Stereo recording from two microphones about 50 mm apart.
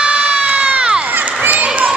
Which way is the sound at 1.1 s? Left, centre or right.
Right.